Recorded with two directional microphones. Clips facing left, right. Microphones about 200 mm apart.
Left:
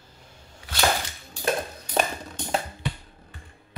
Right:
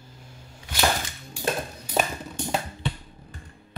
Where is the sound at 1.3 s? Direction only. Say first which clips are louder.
Left 2 dB; 10° right (ahead or behind).